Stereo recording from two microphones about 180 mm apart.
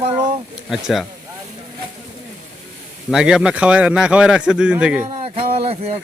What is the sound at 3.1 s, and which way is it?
A man's voice, 5° right (ahead or behind).